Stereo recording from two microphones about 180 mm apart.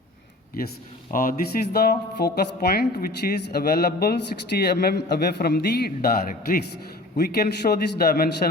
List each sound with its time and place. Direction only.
1.1 s speech: 50° left (ahead or behind)